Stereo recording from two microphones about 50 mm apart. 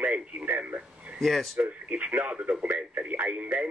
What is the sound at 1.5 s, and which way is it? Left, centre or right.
Speech, right.